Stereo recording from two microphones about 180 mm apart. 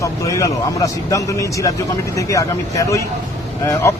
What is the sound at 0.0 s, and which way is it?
A man's voice, 15° left (ahead or behind).